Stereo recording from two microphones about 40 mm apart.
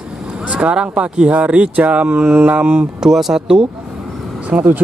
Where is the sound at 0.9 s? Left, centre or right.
Right.